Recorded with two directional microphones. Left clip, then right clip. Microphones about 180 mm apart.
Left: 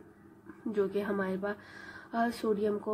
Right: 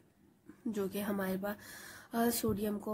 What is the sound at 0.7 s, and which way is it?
A woman's voice, 45° right (ahead or behind).